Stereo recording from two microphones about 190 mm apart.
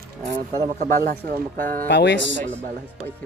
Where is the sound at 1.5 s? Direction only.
10° left (ahead or behind).